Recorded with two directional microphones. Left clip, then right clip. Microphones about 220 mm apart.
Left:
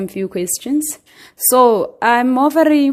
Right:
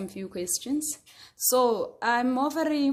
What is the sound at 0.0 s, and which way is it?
Speech, 35° left (ahead or behind).